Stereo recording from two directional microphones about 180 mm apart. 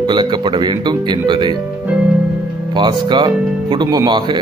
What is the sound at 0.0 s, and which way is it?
Speech, 25° right (ahead or behind).